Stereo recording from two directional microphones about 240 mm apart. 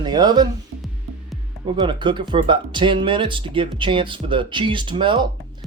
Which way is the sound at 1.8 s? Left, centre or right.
Centre.